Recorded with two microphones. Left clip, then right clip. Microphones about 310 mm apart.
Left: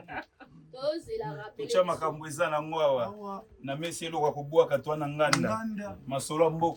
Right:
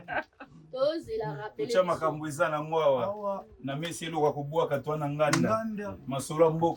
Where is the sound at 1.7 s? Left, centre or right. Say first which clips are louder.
Even; centre.